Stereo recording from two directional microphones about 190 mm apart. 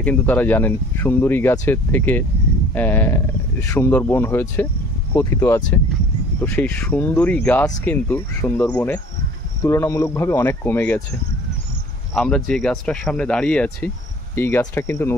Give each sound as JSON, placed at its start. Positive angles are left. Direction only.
{"t": 0.0, "sound": "speech", "side_deg": 10}
{"t": 12.2, "sound": "speech", "side_deg": 5}